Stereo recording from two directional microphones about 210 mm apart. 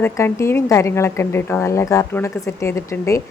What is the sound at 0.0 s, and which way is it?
A woman's voice, 15° left (ahead or behind).